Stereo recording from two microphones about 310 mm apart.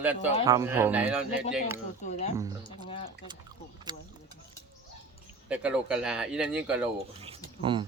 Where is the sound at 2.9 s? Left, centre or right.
Centre.